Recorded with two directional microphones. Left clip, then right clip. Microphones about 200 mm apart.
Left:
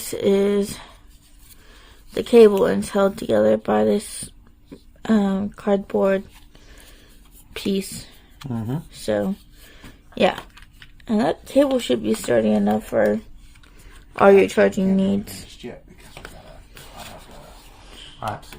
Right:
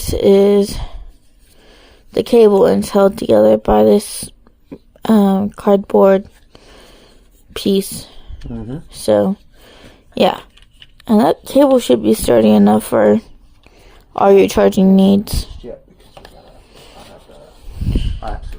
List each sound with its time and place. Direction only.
0.0 s speech: 25° right (ahead or behind)
7.5 s speech: 30° right (ahead or behind)
8.9 s a sound: 30° right (ahead or behind)
11.0 s speech: 35° right (ahead or behind)